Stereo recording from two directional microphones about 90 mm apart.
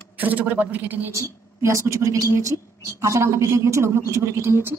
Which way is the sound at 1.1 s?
35° right (ahead or behind).